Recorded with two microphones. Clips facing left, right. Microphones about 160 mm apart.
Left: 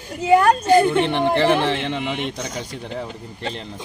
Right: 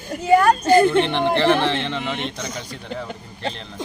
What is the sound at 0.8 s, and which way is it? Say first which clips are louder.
Speech: even; 10° left (ahead or behind).